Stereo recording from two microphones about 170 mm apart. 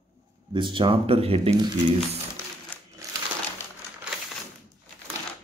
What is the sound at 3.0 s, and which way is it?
Crumpling, 20° right (ahead or behind).